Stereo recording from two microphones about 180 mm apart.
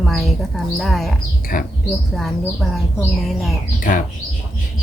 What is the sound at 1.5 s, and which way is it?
Speech, 50° left (ahead or behind).